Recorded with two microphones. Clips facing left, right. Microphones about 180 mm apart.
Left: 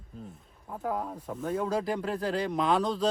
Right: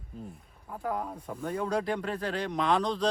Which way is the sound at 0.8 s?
Centre (ahead or behind).